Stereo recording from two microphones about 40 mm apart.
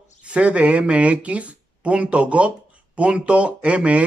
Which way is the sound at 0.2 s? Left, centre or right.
Right.